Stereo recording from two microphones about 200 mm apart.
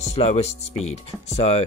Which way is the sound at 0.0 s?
35° left (ahead or behind).